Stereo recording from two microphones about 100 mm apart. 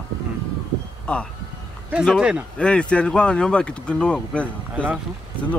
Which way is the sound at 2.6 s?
10° left (ahead or behind).